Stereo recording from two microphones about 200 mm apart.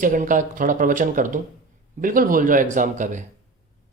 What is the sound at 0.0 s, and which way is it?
Speech, 40° right (ahead or behind).